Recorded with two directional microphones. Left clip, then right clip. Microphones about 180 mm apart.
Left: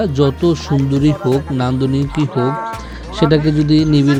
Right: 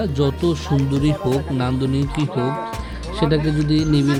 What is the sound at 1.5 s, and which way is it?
Speech, 15° left (ahead or behind).